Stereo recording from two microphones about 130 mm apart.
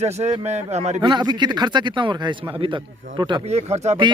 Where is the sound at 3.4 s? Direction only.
55° right (ahead or behind).